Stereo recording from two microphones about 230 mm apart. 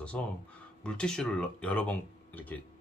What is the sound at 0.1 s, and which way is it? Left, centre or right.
Speech, centre.